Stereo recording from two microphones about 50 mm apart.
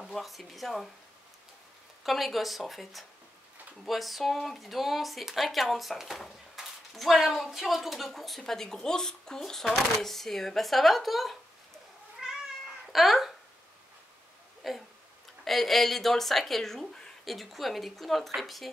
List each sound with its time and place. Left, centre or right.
0.0 s speech: centre
2.0 s speech: centre
12.2 s cat: centre
12.9 s a sound: centre
14.6 s tick-tock: centre
15.4 s speech: centre
17.2 s speech: centre